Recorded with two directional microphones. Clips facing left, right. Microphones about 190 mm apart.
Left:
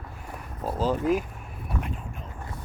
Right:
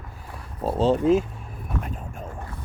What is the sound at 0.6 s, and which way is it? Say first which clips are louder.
Speech: right 5 dB; 25° right (ahead or behind).